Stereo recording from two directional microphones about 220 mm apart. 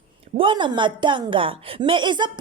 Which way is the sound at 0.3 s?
20° right (ahead or behind).